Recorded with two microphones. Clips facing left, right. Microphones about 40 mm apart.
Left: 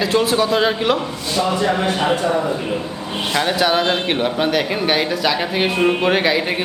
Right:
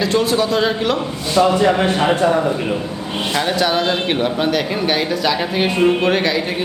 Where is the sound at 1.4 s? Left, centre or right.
Right.